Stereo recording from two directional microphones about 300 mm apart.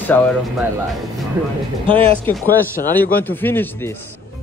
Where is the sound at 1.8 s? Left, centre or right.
Centre.